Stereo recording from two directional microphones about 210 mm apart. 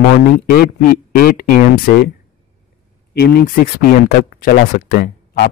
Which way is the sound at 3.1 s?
50° left (ahead or behind).